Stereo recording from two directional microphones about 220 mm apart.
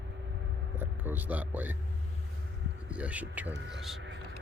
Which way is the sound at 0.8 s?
10° right (ahead or behind).